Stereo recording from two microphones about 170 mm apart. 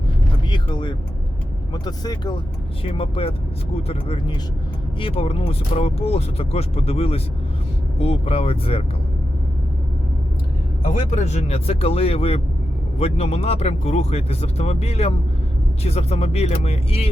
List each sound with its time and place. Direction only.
0.5 s speech: 25° left (ahead or behind)
10.8 s speech: 45° left (ahead or behind)